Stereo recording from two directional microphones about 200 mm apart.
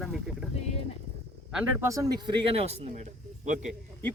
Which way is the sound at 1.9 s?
20° right (ahead or behind).